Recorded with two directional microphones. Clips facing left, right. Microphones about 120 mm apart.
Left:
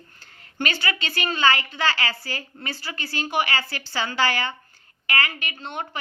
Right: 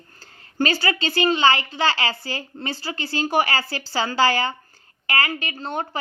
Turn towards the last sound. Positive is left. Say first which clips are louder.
# right 4 dB
turn(degrees=-35)  # may be behind; listen again after turning